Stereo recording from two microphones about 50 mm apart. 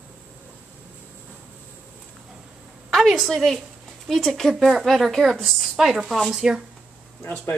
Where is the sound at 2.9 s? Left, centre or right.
Centre.